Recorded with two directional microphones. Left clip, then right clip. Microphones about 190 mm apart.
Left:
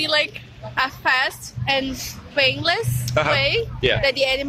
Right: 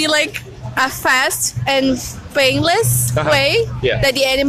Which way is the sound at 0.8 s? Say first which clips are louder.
Right 5 dB; 55° right (ahead or behind).